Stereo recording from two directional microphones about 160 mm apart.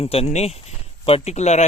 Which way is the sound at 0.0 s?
40° left (ahead or behind).